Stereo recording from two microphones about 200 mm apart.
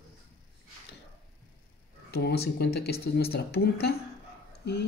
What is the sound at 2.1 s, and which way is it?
Speech, 50° left (ahead or behind).